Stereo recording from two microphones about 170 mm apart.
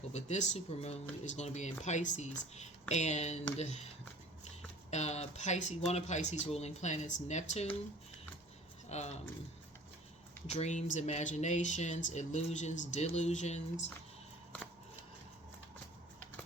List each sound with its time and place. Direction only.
0.1 s speech: 40° left (ahead or behind)
4.9 s speech: 40° left (ahead or behind)
8.9 s speech: 40° left (ahead or behind)
10.4 s speech: 40° left (ahead or behind)